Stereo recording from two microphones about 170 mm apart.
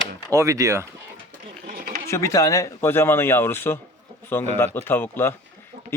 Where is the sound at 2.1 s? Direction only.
15° left (ahead or behind).